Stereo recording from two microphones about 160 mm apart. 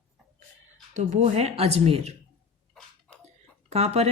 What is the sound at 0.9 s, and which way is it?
Speech, 45° right (ahead or behind).